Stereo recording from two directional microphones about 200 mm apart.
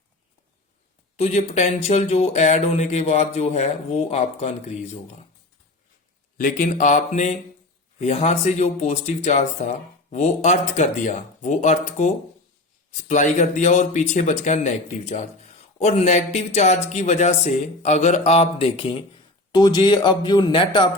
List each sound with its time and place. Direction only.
1.2 s speech: 35° left (ahead or behind)
6.3 s speech: 45° left (ahead or behind); by 20.9 s 25° left (ahead or behind)